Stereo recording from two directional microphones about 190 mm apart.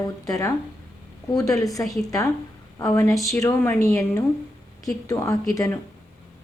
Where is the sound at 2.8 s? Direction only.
15° left (ahead or behind).